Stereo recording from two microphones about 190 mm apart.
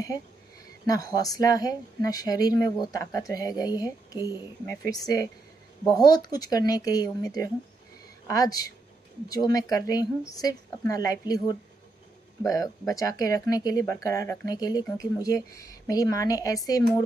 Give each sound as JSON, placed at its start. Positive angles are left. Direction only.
{"t": 0.8, "sound": "speech", "side_deg": 20}